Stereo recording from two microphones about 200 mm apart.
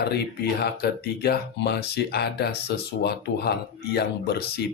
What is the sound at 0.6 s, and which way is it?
Speech, 50° left (ahead or behind).